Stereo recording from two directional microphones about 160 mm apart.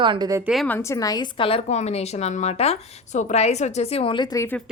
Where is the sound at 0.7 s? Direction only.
15° left (ahead or behind).